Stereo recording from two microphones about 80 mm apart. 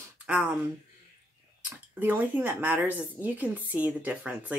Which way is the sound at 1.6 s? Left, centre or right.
Right.